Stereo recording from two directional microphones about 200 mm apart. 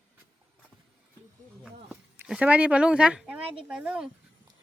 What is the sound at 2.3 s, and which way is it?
Speech, 5° right (ahead or behind).